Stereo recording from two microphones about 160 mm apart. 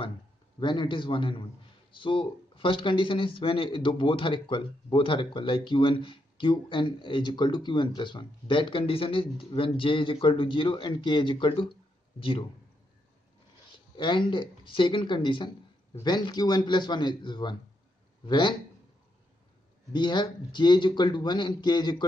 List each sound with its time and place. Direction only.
0.6 s speech: 30° left (ahead or behind)
13.7 s speech: 30° left (ahead or behind)
19.9 s speech: 30° left (ahead or behind)